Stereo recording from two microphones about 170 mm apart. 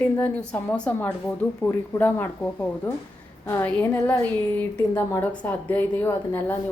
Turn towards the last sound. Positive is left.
turn(degrees=15)  # may be behind; listen again after turning